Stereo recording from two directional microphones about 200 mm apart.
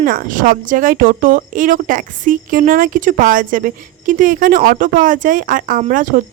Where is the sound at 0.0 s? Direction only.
45° right (ahead or behind).